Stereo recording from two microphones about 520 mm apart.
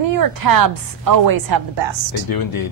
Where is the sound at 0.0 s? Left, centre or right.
Right.